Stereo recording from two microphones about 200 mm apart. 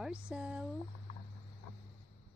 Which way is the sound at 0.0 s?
5° right (ahead or behind).